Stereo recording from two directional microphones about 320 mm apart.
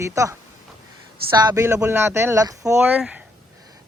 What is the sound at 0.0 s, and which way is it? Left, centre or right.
Speech, centre.